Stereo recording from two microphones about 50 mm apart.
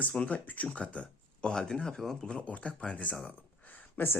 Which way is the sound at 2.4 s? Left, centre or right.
Left.